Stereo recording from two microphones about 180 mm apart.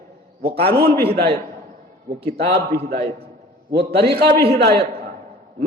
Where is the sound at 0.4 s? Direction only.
35° right (ahead or behind).